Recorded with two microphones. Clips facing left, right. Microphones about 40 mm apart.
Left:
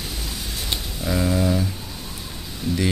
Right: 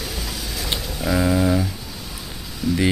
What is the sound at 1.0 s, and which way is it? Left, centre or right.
Speech, right.